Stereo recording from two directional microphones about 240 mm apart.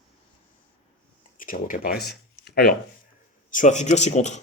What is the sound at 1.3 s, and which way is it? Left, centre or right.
Speech, left.